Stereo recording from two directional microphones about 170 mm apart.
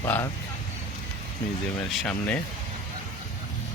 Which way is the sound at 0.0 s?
15° left (ahead or behind).